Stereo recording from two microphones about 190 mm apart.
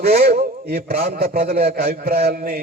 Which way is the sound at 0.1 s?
55° right (ahead or behind).